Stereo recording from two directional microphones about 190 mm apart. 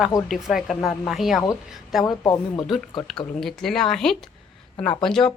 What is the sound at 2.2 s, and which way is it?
Speech, 20° left (ahead or behind).